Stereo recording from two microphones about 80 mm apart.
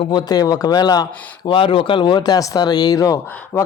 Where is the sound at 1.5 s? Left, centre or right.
Left.